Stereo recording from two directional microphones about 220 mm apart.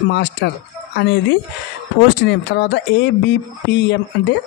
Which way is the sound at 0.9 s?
50° left (ahead or behind).